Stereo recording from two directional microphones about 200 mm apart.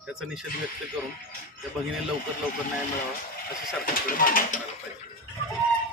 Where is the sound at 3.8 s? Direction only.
45° left (ahead or behind).